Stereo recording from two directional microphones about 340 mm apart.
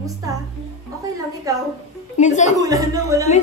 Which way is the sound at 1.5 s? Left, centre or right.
Centre.